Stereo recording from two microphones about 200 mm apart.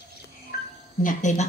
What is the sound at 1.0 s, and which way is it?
Speech, 40° left (ahead or behind).